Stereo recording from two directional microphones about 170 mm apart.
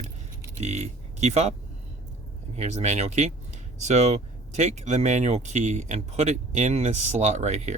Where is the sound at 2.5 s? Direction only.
40° right (ahead or behind).